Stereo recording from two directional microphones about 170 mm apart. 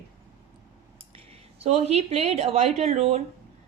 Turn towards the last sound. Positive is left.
turn(degrees=-40)  # may be behind; listen again after turning